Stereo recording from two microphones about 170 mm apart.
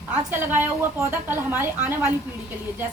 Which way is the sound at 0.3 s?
15° right (ahead or behind).